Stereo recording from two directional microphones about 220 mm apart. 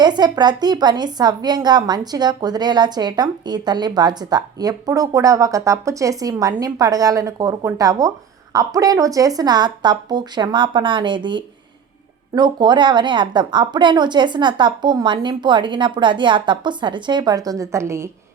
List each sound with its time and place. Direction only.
0.0 s a woman's voice: 20° right (ahead or behind)